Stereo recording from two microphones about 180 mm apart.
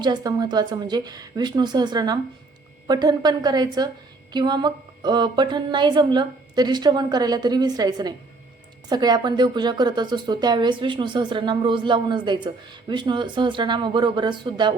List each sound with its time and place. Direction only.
0.0 s speech: 25° right (ahead or behind)